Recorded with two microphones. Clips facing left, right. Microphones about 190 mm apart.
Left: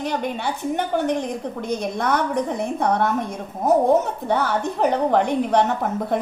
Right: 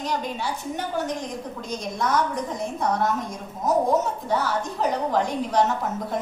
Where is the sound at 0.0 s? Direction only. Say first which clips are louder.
Left 3 dB; 60° left (ahead or behind).